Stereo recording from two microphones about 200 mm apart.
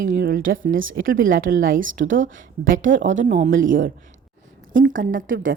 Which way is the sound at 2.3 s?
40° right (ahead or behind).